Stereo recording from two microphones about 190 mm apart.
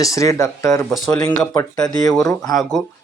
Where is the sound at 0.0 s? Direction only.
15° left (ahead or behind).